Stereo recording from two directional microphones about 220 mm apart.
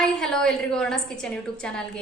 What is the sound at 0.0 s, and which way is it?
A woman's voice, 5° left (ahead or behind).